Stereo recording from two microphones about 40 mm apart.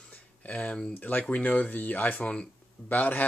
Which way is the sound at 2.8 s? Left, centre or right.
Left.